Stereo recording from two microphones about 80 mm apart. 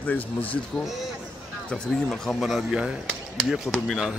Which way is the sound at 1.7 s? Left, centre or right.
Centre.